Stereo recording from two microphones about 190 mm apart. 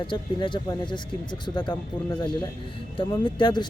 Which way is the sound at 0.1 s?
25° left (ahead or behind).